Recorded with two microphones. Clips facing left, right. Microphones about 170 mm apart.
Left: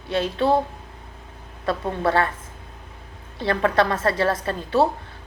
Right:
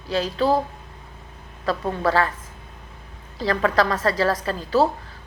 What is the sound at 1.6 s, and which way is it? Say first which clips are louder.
Speech: even; 25° left (ahead or behind).